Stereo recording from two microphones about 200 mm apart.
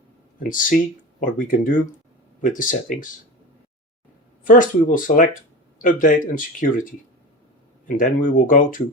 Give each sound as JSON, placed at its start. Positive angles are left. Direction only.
{"t": 0.3, "sound": "speech", "side_deg": 45}
{"t": 4.4, "sound": "speech", "side_deg": 40}
{"t": 7.9, "sound": "speech", "side_deg": 40}